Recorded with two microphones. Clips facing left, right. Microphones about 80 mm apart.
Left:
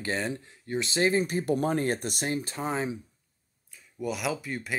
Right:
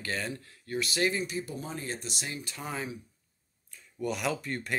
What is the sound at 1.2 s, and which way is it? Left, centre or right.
Speech, left.